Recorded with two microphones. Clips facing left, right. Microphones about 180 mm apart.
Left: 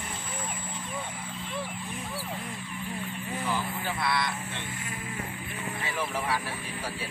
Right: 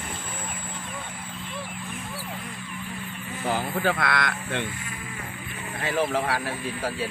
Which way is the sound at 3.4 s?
80° right.